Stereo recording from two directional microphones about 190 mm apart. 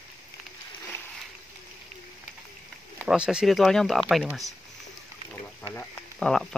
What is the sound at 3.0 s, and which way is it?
Speech, 5° right (ahead or behind).